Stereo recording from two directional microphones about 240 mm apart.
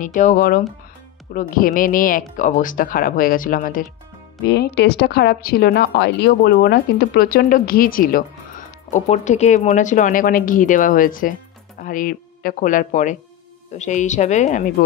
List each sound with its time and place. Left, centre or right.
0.0 s speech: left